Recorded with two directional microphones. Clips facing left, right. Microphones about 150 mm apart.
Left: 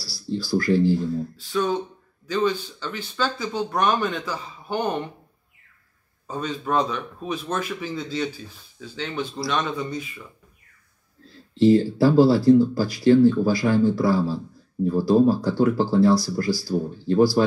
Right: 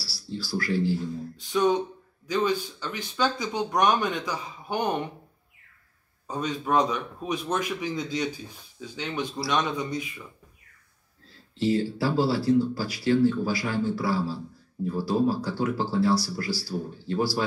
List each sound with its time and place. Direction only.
0.0 s speech: 45° left (ahead or behind)
1.3 s a sound: 20° right (ahead or behind)
2.2 s a man's voice: 10° right (ahead or behind)
6.2 s a man's voice: 10° right (ahead or behind)
11.6 s speech: 45° left (ahead or behind)